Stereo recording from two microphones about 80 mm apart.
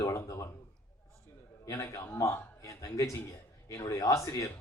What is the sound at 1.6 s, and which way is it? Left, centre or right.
Speech, left.